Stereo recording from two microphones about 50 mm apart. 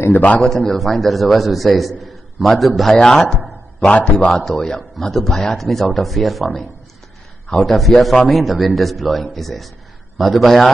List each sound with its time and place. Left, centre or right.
0.1 s a man's voice: left
0.4 s a man's voice: centre
4.5 s a man's voice: centre